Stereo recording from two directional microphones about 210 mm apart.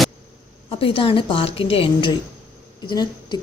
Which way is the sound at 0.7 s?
25° left (ahead or behind).